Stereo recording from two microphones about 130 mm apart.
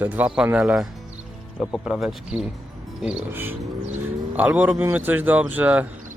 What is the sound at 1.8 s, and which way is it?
Speech, 5° right (ahead or behind).